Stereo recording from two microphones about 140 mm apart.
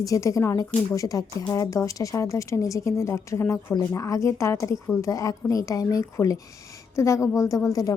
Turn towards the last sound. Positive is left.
turn(degrees=25)  # may be behind; listen again after turning